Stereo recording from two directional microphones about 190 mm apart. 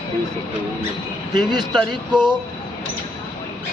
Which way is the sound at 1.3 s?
20° right (ahead or behind).